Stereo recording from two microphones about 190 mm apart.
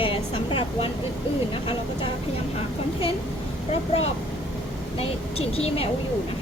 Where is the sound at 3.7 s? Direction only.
30° left (ahead or behind).